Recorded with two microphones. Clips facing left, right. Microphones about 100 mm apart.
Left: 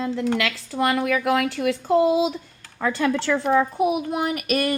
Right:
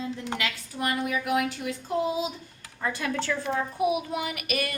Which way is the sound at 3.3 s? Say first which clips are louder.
Left 9 dB; 70° left (ahead or behind).